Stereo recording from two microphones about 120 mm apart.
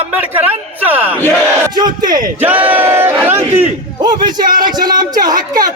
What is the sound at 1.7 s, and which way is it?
Battle cry, 35° right (ahead or behind).